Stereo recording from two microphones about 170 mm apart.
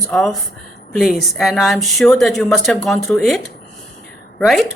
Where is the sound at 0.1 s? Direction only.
Centre (ahead or behind).